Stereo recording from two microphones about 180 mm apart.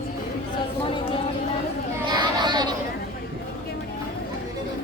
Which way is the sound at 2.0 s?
25° right (ahead or behind).